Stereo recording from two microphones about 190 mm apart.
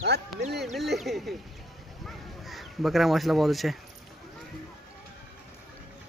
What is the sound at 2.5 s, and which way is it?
Speech, centre (ahead or behind).